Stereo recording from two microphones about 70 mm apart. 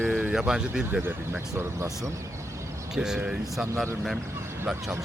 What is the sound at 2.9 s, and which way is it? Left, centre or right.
Speech, centre.